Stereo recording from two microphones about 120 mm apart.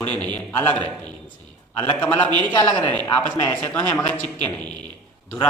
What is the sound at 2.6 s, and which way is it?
Speech, 30° left (ahead or behind).